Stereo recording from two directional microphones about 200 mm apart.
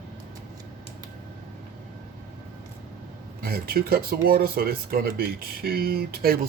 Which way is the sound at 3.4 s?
50° right (ahead or behind).